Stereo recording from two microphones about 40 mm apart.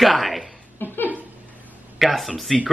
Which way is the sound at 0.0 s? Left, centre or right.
Centre.